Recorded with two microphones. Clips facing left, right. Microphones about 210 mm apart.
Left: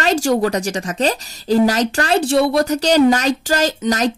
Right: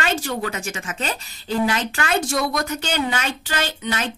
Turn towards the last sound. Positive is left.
turn(degrees=40)  # may be behind; listen again after turning